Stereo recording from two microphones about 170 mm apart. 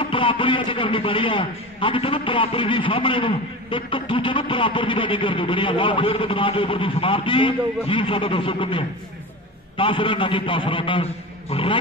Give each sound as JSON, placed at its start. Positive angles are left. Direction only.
{"t": 0.0, "sound": "a man's voice", "side_deg": 30}